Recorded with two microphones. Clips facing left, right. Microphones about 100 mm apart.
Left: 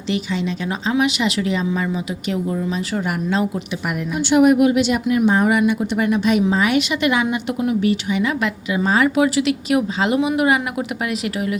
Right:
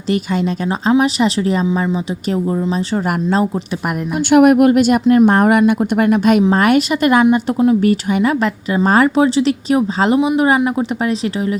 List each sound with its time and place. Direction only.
0.1 s a woman's voice: 45° right (ahead or behind)
1.6 s a woman's voice: 25° right (ahead or behind)
4.3 s speech: 55° right (ahead or behind)
7.3 s a woman's voice: 30° right (ahead or behind)
7.8 s speech: 45° right (ahead or behind)
9.1 s a woman's voice: 30° right (ahead or behind)
10.2 s a woman's voice: 20° right (ahead or behind)